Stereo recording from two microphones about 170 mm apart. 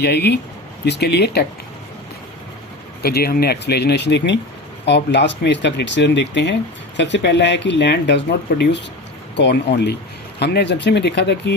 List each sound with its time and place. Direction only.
0.0 s speech: 75° left (ahead or behind)
3.0 s speech: 65° left (ahead or behind); by 11.5 s 90° left